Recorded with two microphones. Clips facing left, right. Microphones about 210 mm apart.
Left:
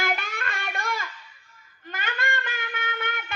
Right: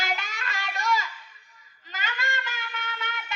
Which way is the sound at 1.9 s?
55° left (ahead or behind).